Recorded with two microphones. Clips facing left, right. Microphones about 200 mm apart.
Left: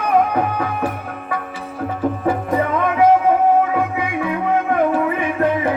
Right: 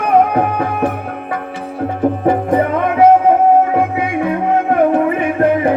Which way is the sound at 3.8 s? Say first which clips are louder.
Right 5 dB; 45° right (ahead or behind).